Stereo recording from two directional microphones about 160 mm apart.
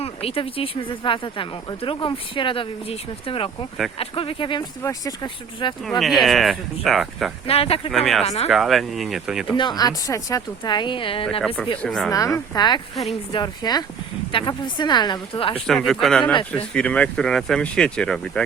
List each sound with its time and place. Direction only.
0.0 s speech: 40° left (ahead or behind)
6.0 s speech: centre (ahead or behind)
7.4 s speech: 40° left (ahead or behind)
7.9 s speech: centre (ahead or behind)
8.2 s speech: 40° left (ahead or behind)
8.4 s speech: centre (ahead or behind)
9.6 s speech: 25° left (ahead or behind)
11.8 s speech: 5° left (ahead or behind)
12.1 s speech: 20° left (ahead or behind)
15.6 s speech: centre (ahead or behind)